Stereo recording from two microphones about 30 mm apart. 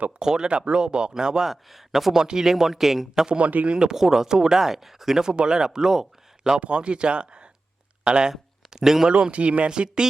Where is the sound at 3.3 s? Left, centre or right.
Right.